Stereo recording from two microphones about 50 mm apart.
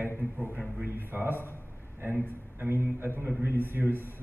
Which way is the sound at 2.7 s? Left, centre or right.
Right.